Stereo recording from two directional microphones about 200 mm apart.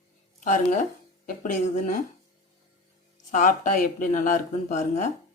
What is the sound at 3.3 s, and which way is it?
Speech, 40° left (ahead or behind).